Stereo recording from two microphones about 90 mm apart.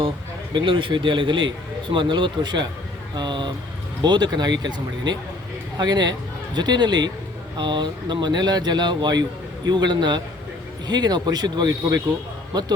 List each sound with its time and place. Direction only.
0.5 s speech: 70° right (ahead or behind); by 12.7 s 55° right (ahead or behind)